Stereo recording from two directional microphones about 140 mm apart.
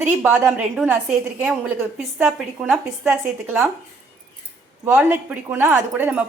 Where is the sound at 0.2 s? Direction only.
10° right (ahead or behind).